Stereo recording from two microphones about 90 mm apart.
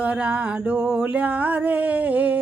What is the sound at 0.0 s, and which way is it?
Music, 15° right (ahead or behind).